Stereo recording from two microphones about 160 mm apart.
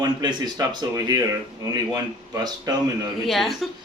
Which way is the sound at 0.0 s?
25° right (ahead or behind).